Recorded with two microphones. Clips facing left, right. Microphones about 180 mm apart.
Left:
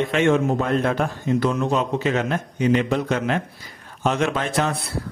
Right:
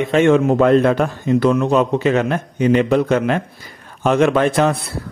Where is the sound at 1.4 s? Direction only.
70° right (ahead or behind).